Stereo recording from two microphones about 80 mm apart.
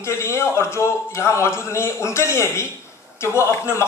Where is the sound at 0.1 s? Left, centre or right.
Left.